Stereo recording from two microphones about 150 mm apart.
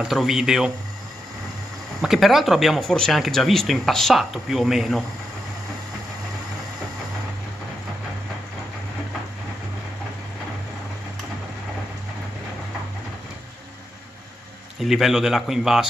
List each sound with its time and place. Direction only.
0.0 s speech: centre (ahead or behind)
2.0 s speech: centre (ahead or behind)
14.8 s speech: centre (ahead or behind)